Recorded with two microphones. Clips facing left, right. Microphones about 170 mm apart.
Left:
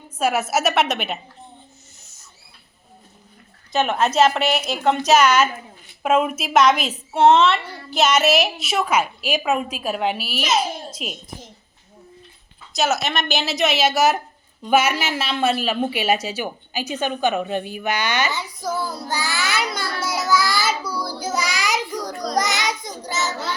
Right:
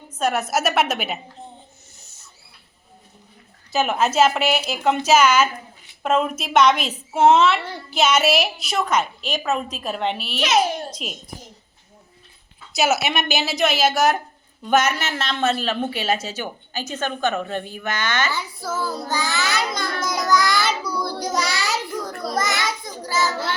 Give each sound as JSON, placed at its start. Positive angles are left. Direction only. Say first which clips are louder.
{"t": 0.2, "sound": "a woman's voice", "louder": "left 1 dB", "side_deg": 5}
{"t": 3.7, "sound": "a woman's voice", "louder": "left 1 dB", "side_deg": -5}
{"t": 12.7, "sound": "a woman's voice", "louder": "right 1 dB", "side_deg": -5}
{"t": 22.4, "sound": "child singing", "louder": "left 2 dB", "side_deg": 20}